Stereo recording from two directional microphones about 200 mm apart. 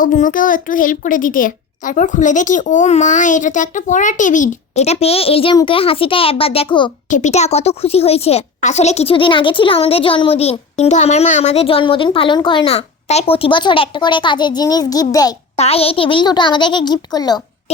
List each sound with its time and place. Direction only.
0.0 s a child's voice: 40° left (ahead or behind); by 6.9 s 25° left (ahead or behind)
7.1 s a woman's voice: 35° left (ahead or behind); by 15.4 s 20° left (ahead or behind)
15.5 s a woman's voice: 30° left (ahead or behind)